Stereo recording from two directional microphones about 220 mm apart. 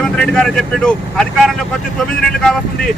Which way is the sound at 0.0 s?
5° left (ahead or behind).